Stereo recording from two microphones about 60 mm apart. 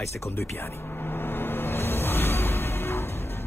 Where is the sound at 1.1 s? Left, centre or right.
Left.